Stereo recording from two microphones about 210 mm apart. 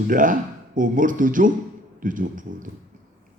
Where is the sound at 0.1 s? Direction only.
40° right (ahead or behind).